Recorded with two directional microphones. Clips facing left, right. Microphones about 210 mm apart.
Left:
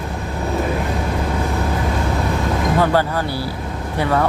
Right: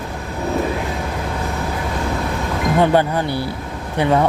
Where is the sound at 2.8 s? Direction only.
20° right (ahead or behind).